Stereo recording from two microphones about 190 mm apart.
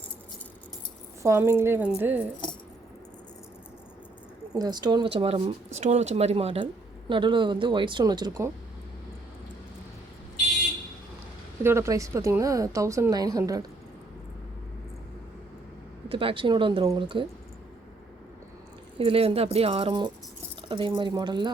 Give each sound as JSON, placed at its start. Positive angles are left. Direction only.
{"t": 1.2, "sound": "speech", "side_deg": -15}
{"t": 4.5, "sound": "speech", "side_deg": -20}
{"t": 11.6, "sound": "speech", "side_deg": -15}
{"t": 16.0, "sound": "speech", "side_deg": -25}
{"t": 18.9, "sound": "speech", "side_deg": -30}